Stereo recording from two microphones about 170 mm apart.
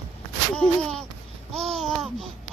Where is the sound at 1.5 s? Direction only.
40° right (ahead or behind).